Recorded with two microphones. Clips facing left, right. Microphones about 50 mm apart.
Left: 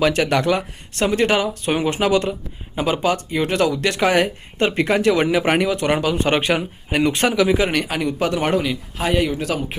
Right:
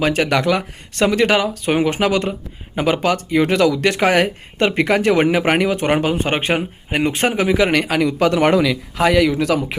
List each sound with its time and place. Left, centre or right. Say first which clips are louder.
0.0 s speech: right 1 dB; right
8.6 s speech: right 6 dB; right